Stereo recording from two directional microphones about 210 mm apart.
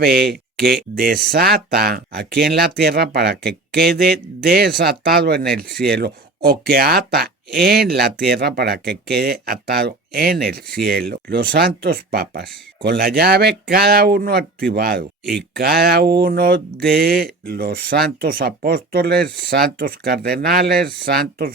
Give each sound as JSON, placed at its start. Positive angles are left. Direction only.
{"t": 0.0, "sound": "speech", "side_deg": -45}